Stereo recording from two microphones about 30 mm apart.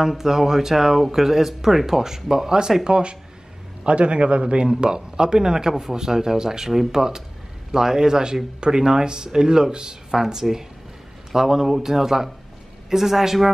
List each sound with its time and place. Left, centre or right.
0.0 s speech: centre
2.8 s a man's voice: right
10.1 s speech: centre